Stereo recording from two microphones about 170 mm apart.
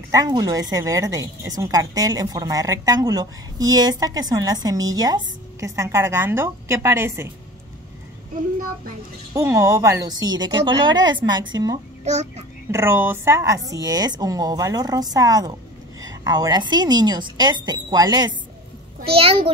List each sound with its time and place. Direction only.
0.1 s a woman's voice: 25° right (ahead or behind)
9.3 s a woman's voice: 15° right (ahead or behind)
12.0 s a child's voice: 40° right (ahead or behind)
12.7 s a woman's voice: 15° right (ahead or behind)
19.1 s a child's voice: 35° right (ahead or behind)